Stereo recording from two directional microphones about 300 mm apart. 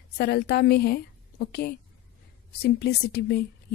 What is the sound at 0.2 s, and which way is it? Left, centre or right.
Speech, left.